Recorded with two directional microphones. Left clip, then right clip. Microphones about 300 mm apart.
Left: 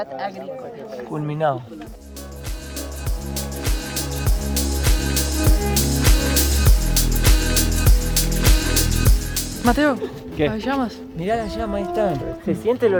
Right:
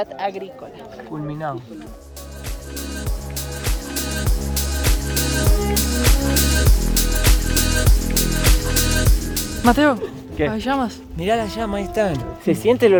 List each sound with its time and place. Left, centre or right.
0.0 s speech: right
1.3 s speech: left
3.6 s music: centre
9.6 s speech: centre
11.2 s speech: right